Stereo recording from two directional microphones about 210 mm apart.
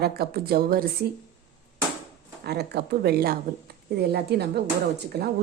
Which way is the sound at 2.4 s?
50° right (ahead or behind).